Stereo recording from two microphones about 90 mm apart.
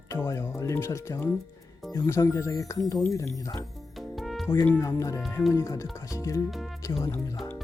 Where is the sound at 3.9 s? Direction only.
Centre (ahead or behind).